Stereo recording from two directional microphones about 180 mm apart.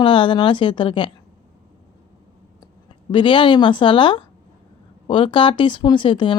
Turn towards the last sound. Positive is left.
turn(degrees=25)  # may be behind; listen again after turning